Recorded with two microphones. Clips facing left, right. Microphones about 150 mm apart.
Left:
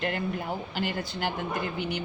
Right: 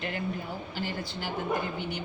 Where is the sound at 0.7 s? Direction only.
65° left (ahead or behind).